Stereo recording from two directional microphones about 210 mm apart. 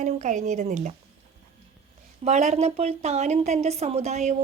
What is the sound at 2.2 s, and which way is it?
A woman's voice, 30° right (ahead or behind).